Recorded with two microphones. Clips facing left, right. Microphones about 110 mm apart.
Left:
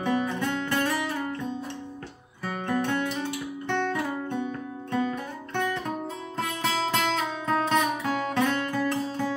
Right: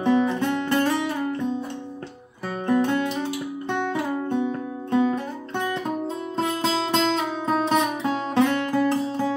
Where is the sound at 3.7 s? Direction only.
15° right (ahead or behind).